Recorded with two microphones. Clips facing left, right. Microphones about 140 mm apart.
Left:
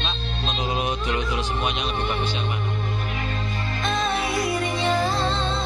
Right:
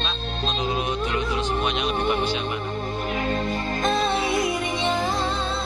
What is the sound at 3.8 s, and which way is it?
Music, 30° right (ahead or behind).